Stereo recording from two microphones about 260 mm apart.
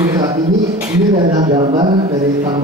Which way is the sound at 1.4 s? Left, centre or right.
Right.